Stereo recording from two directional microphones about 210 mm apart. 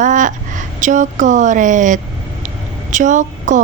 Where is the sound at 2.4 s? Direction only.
35° right (ahead or behind).